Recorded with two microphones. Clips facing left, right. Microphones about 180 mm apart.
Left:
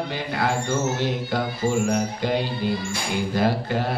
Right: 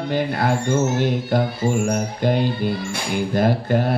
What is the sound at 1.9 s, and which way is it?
Mantra, 50° right (ahead or behind).